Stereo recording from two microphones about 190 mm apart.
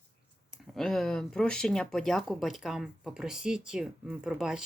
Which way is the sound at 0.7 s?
Centre (ahead or behind).